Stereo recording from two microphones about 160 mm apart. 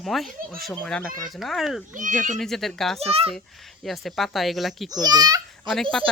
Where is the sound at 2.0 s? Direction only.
50° right (ahead or behind).